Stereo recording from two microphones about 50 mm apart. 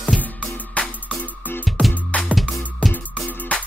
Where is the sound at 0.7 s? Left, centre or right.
Left.